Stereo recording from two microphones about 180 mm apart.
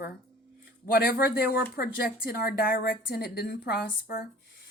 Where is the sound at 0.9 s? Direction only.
60° left (ahead or behind).